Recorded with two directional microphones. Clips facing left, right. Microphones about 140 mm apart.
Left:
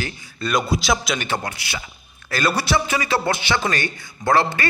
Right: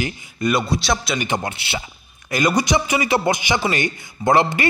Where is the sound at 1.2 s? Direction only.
20° right (ahead or behind).